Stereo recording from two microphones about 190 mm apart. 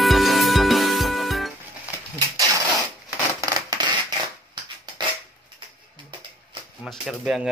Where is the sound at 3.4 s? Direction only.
20° right (ahead or behind).